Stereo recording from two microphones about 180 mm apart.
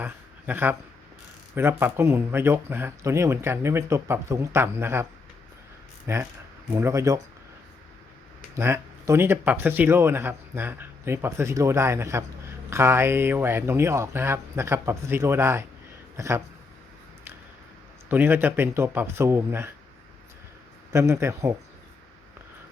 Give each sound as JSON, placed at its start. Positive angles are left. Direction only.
{"t": 0.0, "sound": "a sound", "side_deg": -10}
{"t": 1.5, "sound": "speech", "side_deg": -10}
{"t": 6.1, "sound": "speech", "side_deg": -15}
{"t": 8.5, "sound": "speech", "side_deg": -15}
{"t": 18.1, "sound": "speech", "side_deg": -10}
{"t": 20.9, "sound": "speech", "side_deg": -15}